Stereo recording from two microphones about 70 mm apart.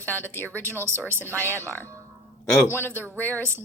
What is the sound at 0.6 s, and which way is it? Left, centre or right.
Speech, right.